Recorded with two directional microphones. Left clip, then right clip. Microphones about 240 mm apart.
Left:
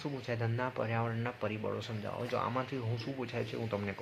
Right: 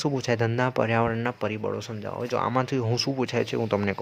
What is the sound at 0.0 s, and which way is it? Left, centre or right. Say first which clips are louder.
Speech: right 12 dB; right.